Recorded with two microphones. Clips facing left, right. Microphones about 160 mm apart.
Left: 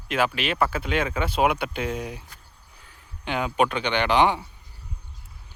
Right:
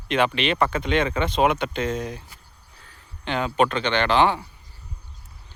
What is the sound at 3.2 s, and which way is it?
A man's voice, 10° left (ahead or behind).